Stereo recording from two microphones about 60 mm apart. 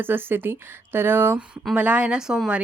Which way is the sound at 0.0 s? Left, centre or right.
Right.